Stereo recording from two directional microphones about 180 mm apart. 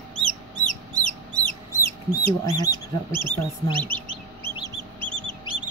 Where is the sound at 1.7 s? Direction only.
20° left (ahead or behind).